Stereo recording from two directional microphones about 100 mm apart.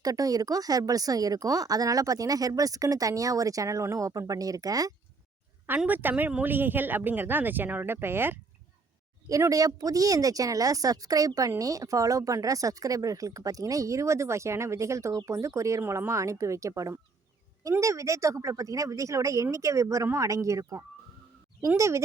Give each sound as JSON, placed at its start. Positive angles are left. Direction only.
{"t": 0.0, "sound": "speech", "side_deg": -35}
{"t": 5.6, "sound": "speech", "side_deg": -20}
{"t": 9.3, "sound": "speech", "side_deg": -35}